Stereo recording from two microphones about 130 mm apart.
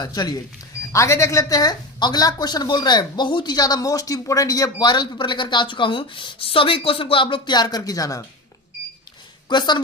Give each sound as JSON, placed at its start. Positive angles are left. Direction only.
{"t": 0.0, "sound": "speech", "side_deg": 30}
{"t": 9.5, "sound": "speech", "side_deg": 35}